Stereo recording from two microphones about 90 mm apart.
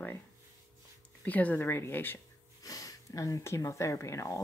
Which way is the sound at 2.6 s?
40° left (ahead or behind).